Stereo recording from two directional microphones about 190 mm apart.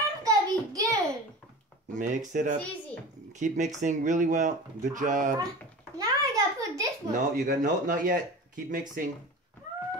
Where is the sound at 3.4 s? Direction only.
40° right (ahead or behind).